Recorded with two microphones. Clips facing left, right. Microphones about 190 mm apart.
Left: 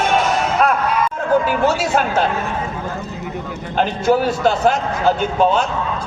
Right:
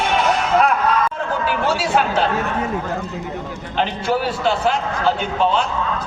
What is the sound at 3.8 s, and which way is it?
A man's voice, 45° left (ahead or behind).